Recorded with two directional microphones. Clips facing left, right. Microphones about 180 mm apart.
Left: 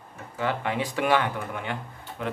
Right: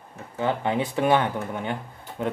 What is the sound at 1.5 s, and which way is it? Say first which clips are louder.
Speech: right 3 dB; 40° right (ahead or behind).